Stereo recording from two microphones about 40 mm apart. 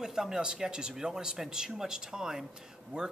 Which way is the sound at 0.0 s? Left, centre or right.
Centre.